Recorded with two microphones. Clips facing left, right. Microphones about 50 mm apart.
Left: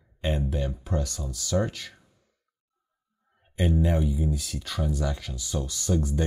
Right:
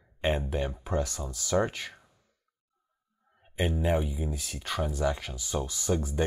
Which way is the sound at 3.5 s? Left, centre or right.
Centre.